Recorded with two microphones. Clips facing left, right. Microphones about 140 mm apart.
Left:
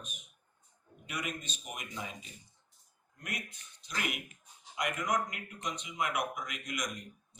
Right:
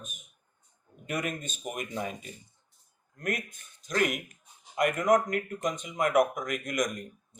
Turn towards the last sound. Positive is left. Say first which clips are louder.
# right 9 dB
turn(degrees=-50)  # may be behind; listen again after turning